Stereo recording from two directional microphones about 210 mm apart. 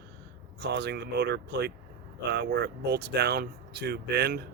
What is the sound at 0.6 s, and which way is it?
Speech, 55° right (ahead or behind).